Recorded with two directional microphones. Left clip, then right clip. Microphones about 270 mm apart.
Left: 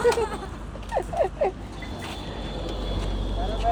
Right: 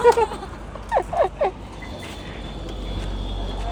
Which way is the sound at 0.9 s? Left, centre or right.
Right.